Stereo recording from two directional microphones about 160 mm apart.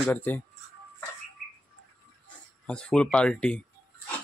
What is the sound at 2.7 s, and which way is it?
Speech, 5° left (ahead or behind).